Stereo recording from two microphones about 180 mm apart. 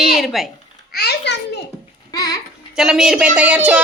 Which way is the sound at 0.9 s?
65° left (ahead or behind).